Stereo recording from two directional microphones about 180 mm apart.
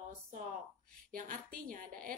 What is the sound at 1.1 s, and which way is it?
A woman's voice, 50° right (ahead or behind).